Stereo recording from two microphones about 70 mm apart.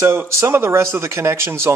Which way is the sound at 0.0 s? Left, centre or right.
Right.